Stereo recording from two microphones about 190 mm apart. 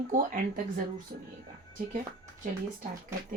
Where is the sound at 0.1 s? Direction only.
45° right (ahead or behind).